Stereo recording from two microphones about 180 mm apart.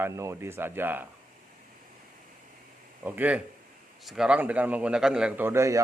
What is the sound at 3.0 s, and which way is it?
A man's voice, 10° right (ahead or behind).